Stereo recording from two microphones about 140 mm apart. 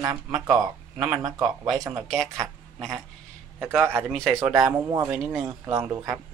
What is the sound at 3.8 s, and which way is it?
Speech, 15° right (ahead or behind).